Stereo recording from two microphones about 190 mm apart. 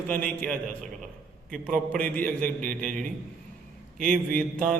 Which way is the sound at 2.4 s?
45° right (ahead or behind).